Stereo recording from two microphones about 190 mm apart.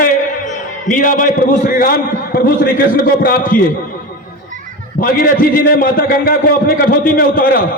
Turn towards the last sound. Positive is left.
turn(degrees=50)  # may be behind; listen again after turning